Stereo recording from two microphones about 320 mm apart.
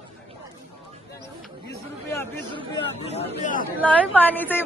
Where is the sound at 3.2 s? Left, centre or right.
Left.